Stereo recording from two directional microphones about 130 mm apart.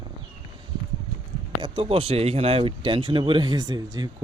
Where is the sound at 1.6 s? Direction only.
45° right (ahead or behind).